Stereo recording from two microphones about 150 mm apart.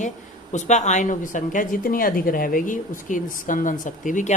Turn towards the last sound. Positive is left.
turn(degrees=60)  # may be behind; listen again after turning